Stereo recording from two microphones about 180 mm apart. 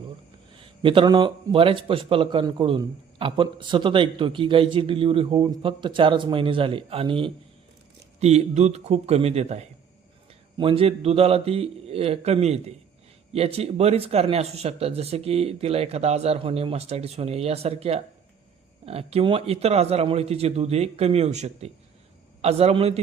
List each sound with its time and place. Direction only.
0.5 s speech: 30° right (ahead or behind)